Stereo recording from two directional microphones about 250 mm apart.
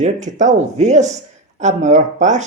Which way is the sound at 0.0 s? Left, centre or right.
Right.